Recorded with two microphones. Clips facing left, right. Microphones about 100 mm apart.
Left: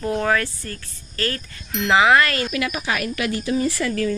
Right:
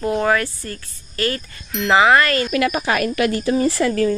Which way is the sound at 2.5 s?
45° right (ahead or behind).